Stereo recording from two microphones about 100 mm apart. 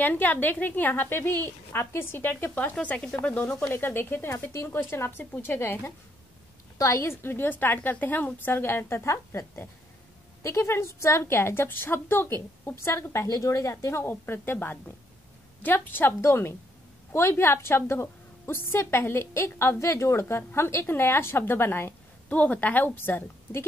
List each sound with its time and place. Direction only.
0.0 s a woman's voice: 20° left (ahead or behind)
3.7 s a woman's voice: 25° left (ahead or behind)